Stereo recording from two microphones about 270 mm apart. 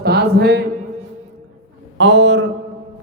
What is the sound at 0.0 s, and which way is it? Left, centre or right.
Speech, right.